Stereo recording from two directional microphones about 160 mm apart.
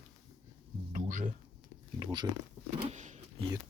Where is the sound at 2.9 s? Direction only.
50° right (ahead or behind).